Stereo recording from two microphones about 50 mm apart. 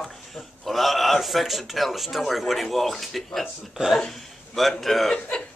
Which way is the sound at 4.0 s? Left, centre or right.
Centre.